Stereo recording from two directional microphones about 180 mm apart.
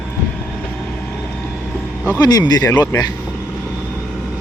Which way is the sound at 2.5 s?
20° left (ahead or behind).